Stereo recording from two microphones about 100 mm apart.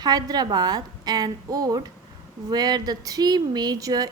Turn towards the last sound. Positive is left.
turn(degrees=-40)  # may be behind; listen again after turning